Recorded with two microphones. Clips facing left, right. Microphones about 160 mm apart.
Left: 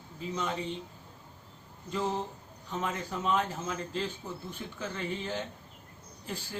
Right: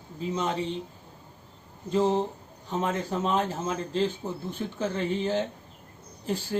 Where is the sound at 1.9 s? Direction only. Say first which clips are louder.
Right 8 dB; 30° right (ahead or behind).